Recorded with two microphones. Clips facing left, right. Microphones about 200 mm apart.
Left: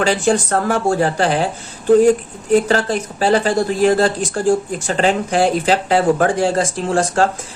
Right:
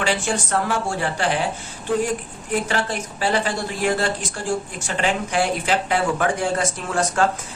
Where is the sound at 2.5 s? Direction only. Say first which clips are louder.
Left 9 dB; 40° left (ahead or behind).